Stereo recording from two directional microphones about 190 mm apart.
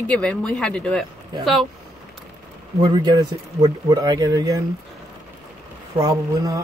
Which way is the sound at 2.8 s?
20° right (ahead or behind).